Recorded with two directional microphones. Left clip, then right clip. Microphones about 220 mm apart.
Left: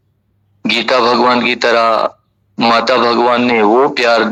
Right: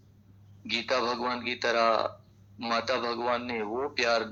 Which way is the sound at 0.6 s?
50° left (ahead or behind).